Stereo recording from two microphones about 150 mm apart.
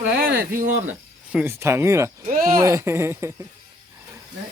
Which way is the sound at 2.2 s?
70° right (ahead or behind).